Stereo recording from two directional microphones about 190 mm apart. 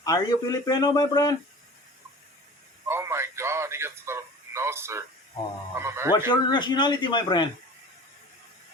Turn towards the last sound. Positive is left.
turn(degrees=25)  # may be behind; listen again after turning